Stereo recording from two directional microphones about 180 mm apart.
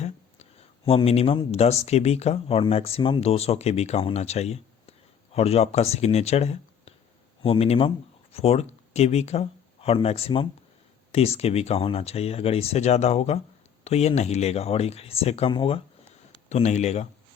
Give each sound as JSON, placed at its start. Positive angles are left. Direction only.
{"t": 0.9, "sound": "speech", "side_deg": 35}